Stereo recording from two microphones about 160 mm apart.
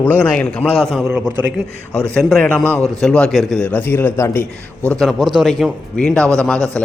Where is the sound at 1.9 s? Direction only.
10° left (ahead or behind).